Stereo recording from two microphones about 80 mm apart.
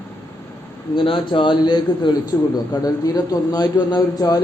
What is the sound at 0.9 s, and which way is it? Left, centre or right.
A man's voice, left.